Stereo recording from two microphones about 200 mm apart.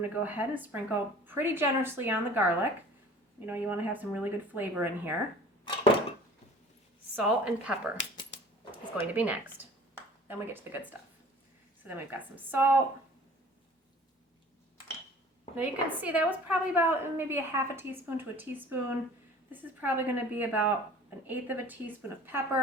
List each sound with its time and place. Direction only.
0.0 s a woman's voice: 10° right (ahead or behind)
5.6 s a sound: 30° left (ahead or behind)
7.2 s a woman's voice: 5° right (ahead or behind)
9.1 s a woman's voice: 10° right (ahead or behind)
16.0 s a woman's voice: 5° right (ahead or behind)